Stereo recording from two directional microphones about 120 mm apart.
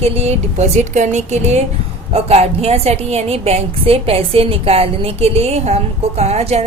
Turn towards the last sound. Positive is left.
turn(degrees=-60)  # may be behind; listen again after turning